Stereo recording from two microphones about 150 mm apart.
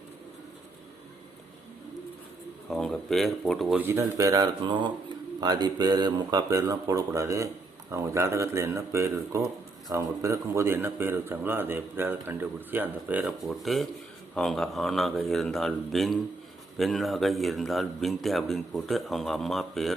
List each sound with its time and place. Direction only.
2.6 s speech: centre (ahead or behind)
3.8 s a man's voice: 15° right (ahead or behind); by 19.9 s centre (ahead or behind)